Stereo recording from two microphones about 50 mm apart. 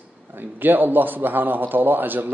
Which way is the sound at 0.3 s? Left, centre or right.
Right.